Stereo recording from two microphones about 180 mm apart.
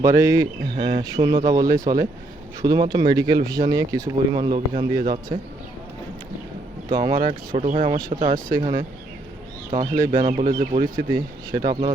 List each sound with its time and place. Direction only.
0.0 s speech: 20° right (ahead or behind)
6.9 s speech: 20° right (ahead or behind)
7.5 s speech: 45° right (ahead or behind)
9.7 s speech: 45° right (ahead or behind)
11.1 s speech: 25° right (ahead or behind)